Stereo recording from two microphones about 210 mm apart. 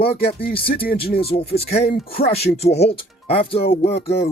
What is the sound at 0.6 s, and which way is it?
Speech, 45° left (ahead or behind).